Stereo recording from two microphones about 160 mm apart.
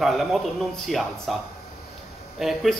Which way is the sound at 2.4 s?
Centre (ahead or behind).